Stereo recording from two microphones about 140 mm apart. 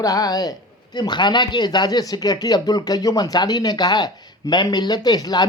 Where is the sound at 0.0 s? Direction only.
25° left (ahead or behind).